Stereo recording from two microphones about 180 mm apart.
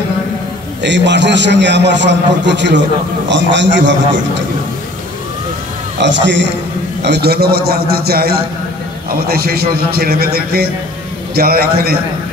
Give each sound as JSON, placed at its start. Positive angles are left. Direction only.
{"t": 0.8, "sound": "a man's voice", "side_deg": -80}
{"t": 5.9, "sound": "a man's voice", "side_deg": -80}
{"t": 7.0, "sound": "a man's voice", "side_deg": -70}